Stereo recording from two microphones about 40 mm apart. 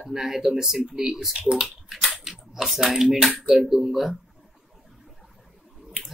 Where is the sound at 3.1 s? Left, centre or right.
Right.